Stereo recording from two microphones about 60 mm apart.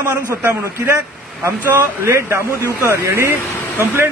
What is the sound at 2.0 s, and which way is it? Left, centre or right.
Speech, right.